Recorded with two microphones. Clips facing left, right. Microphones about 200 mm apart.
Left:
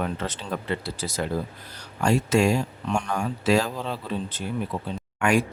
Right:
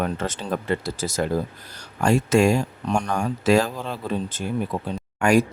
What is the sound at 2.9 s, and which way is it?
Speech, 40° right (ahead or behind).